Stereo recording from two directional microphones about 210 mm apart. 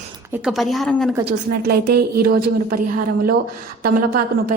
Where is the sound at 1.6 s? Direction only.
45° right (ahead or behind).